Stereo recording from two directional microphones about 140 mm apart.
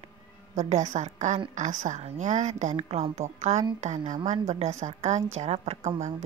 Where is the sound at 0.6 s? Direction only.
55° right (ahead or behind).